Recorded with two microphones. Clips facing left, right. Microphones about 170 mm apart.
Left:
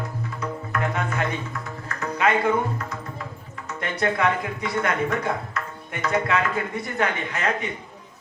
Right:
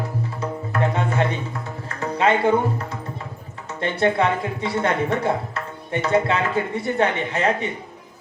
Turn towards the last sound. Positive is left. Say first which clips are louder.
# right 4 dB
turn(degrees=-30)  # may be behind; listen again after turning